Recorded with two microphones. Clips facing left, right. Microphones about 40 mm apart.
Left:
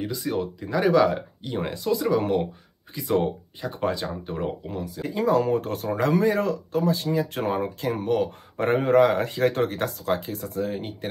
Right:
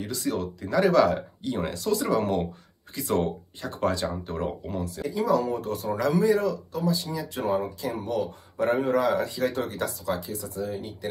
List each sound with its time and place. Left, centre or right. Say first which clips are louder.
0.0 s speech: left 2 dB; centre
5.0 s speech: left 3 dB; left